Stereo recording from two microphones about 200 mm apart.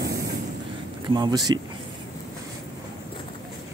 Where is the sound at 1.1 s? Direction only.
20° right (ahead or behind).